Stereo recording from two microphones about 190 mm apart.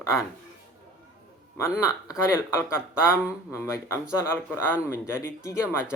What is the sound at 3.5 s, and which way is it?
Speech, 15° left (ahead or behind).